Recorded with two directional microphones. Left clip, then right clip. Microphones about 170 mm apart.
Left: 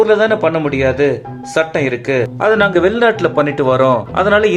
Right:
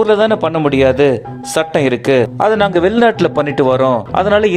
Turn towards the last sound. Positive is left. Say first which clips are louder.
# even
turn(degrees=-40)  # may be behind; listen again after turning